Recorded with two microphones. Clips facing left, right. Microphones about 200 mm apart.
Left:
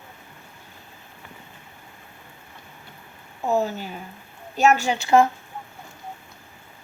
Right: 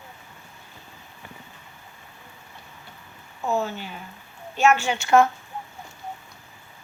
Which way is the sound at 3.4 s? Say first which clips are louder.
Left 3 dB; 35° left (ahead or behind).